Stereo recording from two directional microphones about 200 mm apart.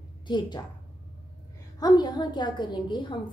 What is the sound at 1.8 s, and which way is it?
A woman's voice, 20° left (ahead or behind).